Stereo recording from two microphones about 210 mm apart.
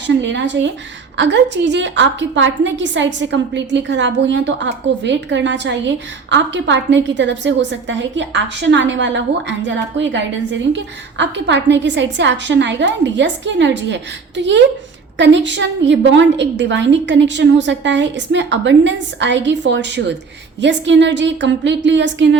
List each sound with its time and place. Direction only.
0.1 s a woman's voice: 60° right (ahead or behind)